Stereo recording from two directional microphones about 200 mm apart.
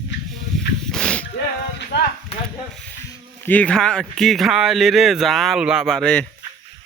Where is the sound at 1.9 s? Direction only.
60° left (ahead or behind).